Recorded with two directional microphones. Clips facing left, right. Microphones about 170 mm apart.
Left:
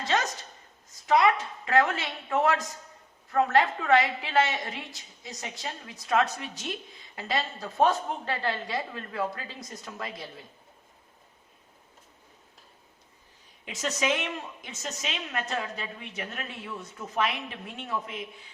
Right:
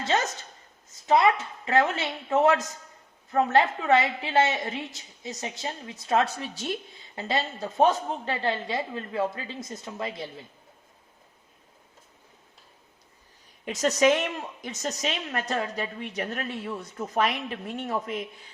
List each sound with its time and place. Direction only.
0.0 s a sound: 25° right (ahead or behind)
0.9 s a woman's voice: 25° right (ahead or behind)
13.7 s a woman's voice: 40° right (ahead or behind)